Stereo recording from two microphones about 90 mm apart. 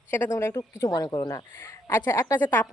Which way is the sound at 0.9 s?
50° left (ahead or behind).